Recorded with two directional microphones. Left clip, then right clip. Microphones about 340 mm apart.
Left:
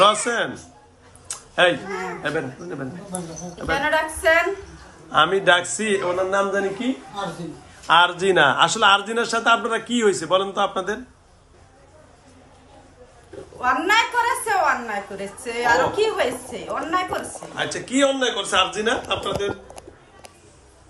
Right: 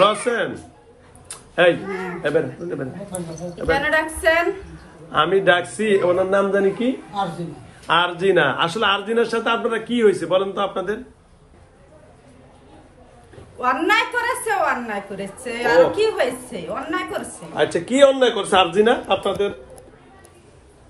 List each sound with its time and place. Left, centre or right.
0.0 s a woman's voice: centre
1.3 s a sound: centre
2.2 s a woman's voice: centre
13.6 s a woman's voice: centre
17.6 s speech: centre